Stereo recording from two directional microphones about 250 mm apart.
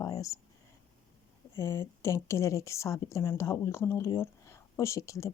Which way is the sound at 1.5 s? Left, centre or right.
Centre.